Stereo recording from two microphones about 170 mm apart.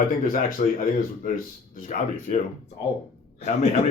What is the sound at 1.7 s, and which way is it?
Speech, 50° left (ahead or behind).